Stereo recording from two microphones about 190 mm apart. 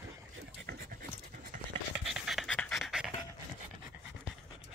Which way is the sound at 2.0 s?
Centre (ahead or behind).